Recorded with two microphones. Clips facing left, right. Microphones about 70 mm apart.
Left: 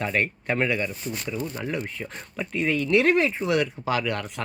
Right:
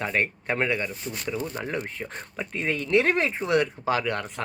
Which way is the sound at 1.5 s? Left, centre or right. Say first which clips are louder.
Left 1 dB; right.